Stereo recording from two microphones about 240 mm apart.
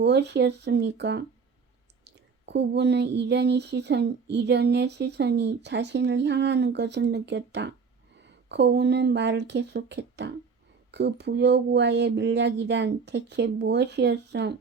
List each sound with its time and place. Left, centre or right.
0.0 s speech: right